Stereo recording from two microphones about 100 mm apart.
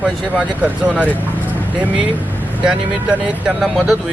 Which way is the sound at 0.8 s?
15° right (ahead or behind).